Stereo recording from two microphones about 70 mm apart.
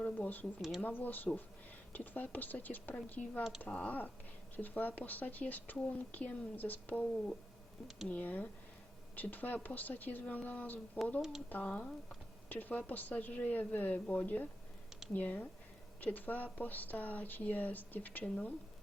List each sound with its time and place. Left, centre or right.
0.0 s speech: left
8.1 s speech: left
11.2 s speech: centre
11.4 s speech: left